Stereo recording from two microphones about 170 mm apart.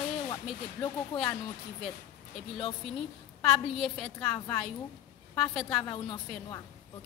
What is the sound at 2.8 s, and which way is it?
A woman's voice, centre (ahead or behind).